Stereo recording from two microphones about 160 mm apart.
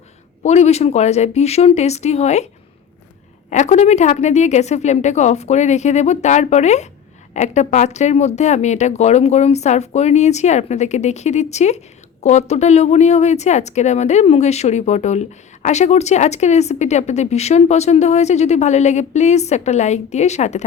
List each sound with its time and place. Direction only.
0.4 s speech: 45° left (ahead or behind)
3.5 s speech: 45° left (ahead or behind)